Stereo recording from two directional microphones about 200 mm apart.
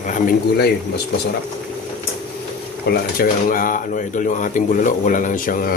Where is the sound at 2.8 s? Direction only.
45° left (ahead or behind).